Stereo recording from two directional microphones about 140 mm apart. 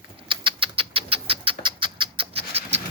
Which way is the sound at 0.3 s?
40° right (ahead or behind).